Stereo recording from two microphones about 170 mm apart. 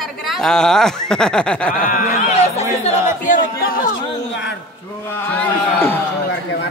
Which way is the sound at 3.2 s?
55° left (ahead or behind).